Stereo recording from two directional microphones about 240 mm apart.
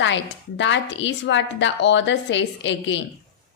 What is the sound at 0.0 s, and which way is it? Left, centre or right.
Speech, left.